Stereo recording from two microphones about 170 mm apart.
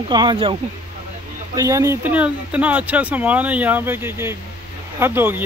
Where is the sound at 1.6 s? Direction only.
20° right (ahead or behind).